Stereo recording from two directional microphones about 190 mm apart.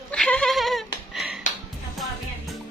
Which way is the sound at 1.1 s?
Centre (ahead or behind).